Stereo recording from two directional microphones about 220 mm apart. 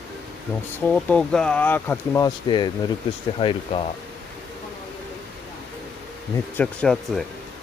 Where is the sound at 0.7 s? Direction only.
5° left (ahead or behind); by 3.8 s 25° left (ahead or behind).